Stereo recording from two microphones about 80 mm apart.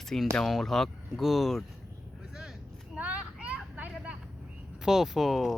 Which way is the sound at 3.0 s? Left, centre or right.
Centre.